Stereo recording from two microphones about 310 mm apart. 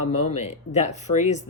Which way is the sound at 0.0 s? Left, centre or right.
Left.